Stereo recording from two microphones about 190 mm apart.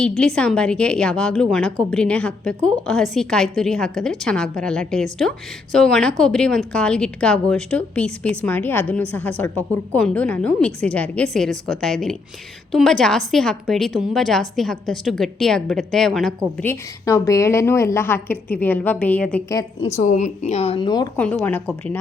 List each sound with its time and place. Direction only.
0.2 s a woman's voice: 5° left (ahead or behind)
16.6 s a woman's voice: 15° left (ahead or behind)
19.5 s a woman's voice: 20° left (ahead or behind)
20.0 s speech: 40° left (ahead or behind); by 21.1 s 20° left (ahead or behind)
21.2 s a woman's voice: 10° left (ahead or behind)